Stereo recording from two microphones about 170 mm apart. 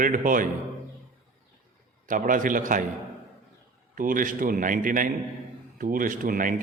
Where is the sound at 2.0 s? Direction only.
50° right (ahead or behind).